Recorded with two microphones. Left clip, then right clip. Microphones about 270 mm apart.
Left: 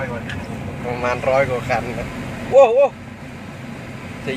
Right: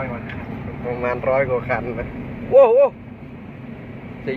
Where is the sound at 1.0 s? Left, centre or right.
Centre.